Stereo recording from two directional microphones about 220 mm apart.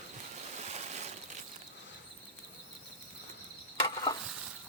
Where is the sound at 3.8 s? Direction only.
20° left (ahead or behind).